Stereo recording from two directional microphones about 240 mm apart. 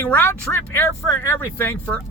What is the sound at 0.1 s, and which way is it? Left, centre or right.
Speech, centre.